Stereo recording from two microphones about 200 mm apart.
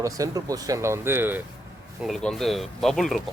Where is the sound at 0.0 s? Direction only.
15° right (ahead or behind).